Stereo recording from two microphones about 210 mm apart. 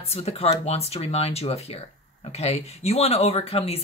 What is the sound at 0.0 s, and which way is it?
Speech, 30° left (ahead or behind).